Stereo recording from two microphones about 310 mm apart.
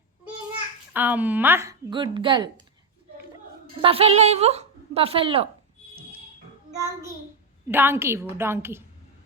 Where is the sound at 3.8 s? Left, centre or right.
Centre.